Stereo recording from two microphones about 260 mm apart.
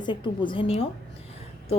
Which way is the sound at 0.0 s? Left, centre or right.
Centre.